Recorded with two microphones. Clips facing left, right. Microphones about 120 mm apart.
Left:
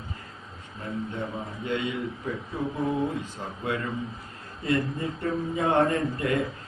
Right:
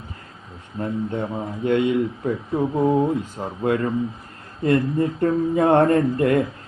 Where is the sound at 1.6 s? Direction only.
55° right (ahead or behind).